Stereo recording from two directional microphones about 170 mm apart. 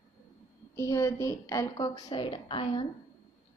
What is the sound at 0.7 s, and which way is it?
A woman's voice, 15° left (ahead or behind).